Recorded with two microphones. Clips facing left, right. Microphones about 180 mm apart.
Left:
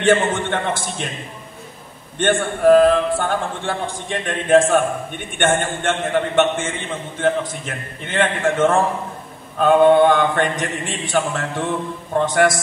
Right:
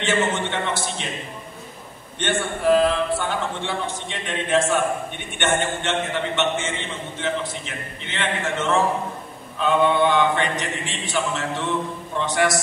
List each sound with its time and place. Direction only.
0.0 s a man's voice: 50° left (ahead or behind)
2.1 s a man's voice: 50° left (ahead or behind)